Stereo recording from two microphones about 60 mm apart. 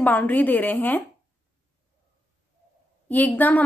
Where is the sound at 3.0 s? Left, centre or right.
Left.